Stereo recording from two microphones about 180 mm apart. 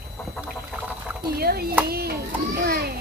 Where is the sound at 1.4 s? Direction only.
60° right (ahead or behind).